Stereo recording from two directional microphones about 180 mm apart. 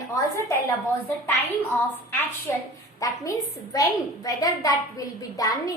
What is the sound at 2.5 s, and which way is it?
A woman's voice, 15° left (ahead or behind).